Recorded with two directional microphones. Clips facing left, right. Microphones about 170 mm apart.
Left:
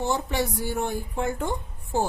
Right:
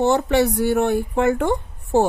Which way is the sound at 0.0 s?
70° right (ahead or behind).